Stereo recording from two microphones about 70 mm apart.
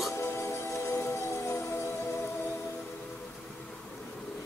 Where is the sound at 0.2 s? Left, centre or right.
Left.